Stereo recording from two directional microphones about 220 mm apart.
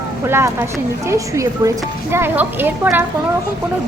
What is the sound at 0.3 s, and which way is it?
Speech, 10° right (ahead or behind).